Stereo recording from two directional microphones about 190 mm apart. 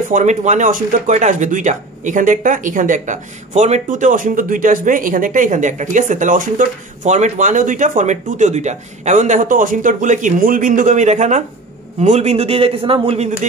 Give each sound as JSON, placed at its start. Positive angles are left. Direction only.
{"t": 0.1, "sound": "speech", "side_deg": -40}